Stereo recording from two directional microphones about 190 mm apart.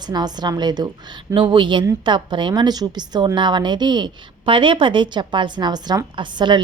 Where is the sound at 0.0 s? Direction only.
20° right (ahead or behind).